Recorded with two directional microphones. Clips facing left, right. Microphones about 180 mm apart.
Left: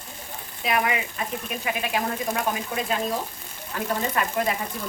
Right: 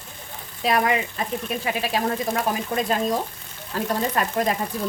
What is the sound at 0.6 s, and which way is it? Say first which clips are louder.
Speech: right 4 dB; 35° right (ahead or behind).